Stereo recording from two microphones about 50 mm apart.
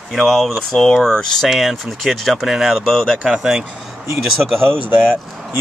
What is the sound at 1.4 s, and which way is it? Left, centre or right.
Speech, centre.